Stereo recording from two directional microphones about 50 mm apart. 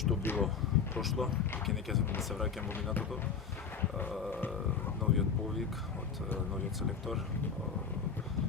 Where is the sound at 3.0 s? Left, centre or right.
Left.